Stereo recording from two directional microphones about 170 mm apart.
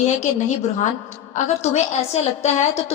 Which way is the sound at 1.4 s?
40° left (ahead or behind).